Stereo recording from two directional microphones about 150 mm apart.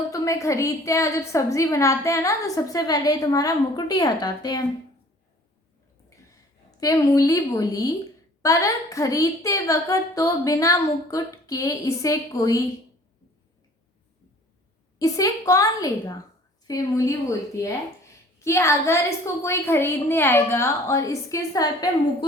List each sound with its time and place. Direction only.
0.1 s a woman's voice: 20° left (ahead or behind)
6.1 s a sound: 25° left (ahead or behind)
8.4 s a woman's voice: 20° left (ahead or behind)
14.9 s a woman's voice: 20° left (ahead or behind)